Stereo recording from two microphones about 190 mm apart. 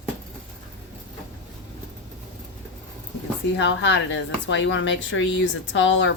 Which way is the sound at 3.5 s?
70° left (ahead or behind).